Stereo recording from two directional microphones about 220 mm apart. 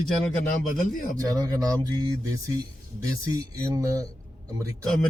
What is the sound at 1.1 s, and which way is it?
Speech, 15° right (ahead or behind).